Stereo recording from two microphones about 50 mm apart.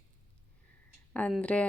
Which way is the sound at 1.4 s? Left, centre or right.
Left.